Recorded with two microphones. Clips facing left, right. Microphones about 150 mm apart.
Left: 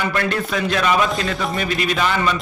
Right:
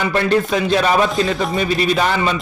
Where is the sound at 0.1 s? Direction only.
35° right (ahead or behind).